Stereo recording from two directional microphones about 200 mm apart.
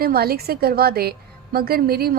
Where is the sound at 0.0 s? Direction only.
50° right (ahead or behind).